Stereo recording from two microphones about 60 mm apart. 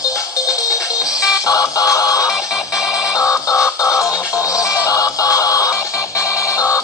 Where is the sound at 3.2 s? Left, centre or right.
Left.